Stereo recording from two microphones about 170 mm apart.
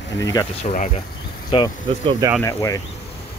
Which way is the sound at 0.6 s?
50° left (ahead or behind).